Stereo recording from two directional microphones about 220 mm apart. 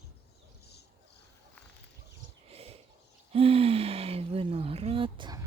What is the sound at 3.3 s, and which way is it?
Speech, 25° right (ahead or behind).